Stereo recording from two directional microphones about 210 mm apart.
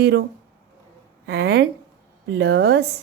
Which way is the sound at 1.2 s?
50° right (ahead or behind).